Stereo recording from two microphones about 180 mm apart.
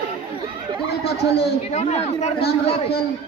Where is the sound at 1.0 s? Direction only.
65° left (ahead or behind).